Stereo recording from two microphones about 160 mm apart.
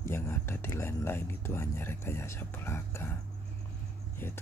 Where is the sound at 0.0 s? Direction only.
15° left (ahead or behind).